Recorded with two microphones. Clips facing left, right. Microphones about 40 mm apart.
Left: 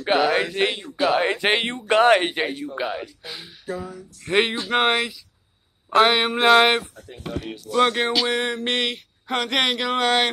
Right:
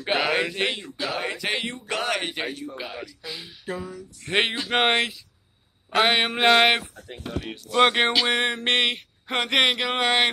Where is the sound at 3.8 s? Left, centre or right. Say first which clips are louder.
Left 2 dB; centre.